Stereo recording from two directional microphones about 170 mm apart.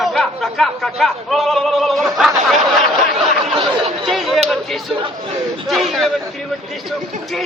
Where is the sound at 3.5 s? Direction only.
30° right (ahead or behind).